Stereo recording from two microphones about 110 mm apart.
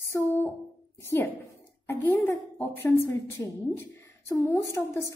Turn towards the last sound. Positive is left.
turn(degrees=25)  # may be behind; listen again after turning